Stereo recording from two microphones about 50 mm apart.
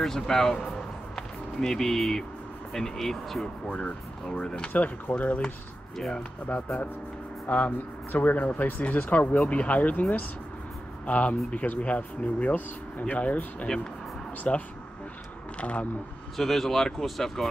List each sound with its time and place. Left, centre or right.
0.0 s speech: centre
1.1 s music: centre
2.7 s speech: centre
3.6 s speech: left
4.3 s speech: centre
4.7 s speech: left
5.9 s speech: centre
7.4 s a man's voice: left
11.1 s speech: left
14.5 s speech: left
16.3 s speech: centre